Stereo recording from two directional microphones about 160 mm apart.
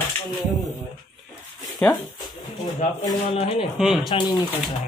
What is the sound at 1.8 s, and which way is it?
Speech, 5° left (ahead or behind).